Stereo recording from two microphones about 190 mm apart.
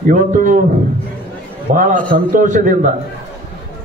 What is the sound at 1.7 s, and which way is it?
A man's voice, 40° right (ahead or behind).